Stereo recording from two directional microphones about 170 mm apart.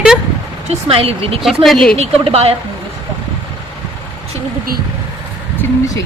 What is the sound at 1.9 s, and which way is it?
Speech, 35° right (ahead or behind).